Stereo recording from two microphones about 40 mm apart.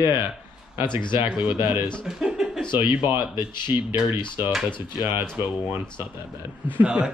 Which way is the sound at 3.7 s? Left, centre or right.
Right.